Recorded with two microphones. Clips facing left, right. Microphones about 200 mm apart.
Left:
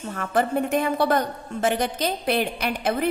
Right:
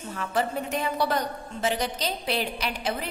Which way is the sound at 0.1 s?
55° left (ahead or behind).